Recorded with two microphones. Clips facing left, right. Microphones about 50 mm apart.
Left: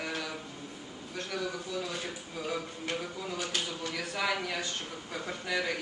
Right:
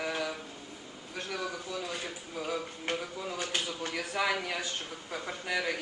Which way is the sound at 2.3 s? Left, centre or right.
Centre.